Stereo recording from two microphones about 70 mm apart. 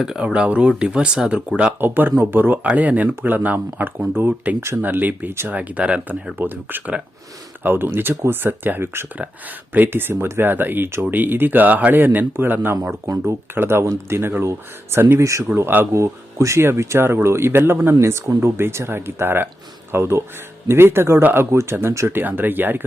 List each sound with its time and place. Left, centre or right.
0.0 s speech: centre
1.8 s speech: right
6.4 s speech: right
9.1 s speech: right
15.2 s speech: right
15.5 s speech: right
16.0 s speech: right
18.0 s speech: right